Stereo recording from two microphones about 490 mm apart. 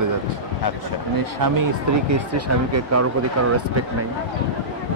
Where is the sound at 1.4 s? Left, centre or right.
Right.